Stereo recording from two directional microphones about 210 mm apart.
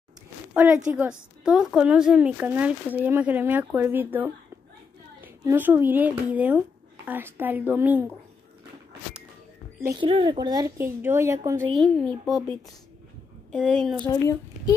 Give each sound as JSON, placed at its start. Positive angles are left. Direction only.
{"t": 0.6, "sound": "a woman's voice", "side_deg": -5}
{"t": 9.8, "sound": "speech", "side_deg": -10}
{"t": 10.0, "sound": "a woman's voice", "side_deg": -25}
{"t": 11.7, "sound": "a woman's voice", "side_deg": 0}
{"t": 13.5, "sound": "a woman's voice", "side_deg": 5}